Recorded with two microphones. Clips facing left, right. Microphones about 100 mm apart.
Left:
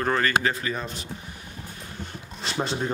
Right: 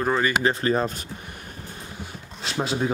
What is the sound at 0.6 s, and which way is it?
Speech, 45° right (ahead or behind).